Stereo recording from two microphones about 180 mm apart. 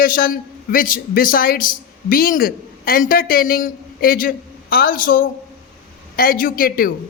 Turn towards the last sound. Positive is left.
turn(degrees=55)  # may be behind; listen again after turning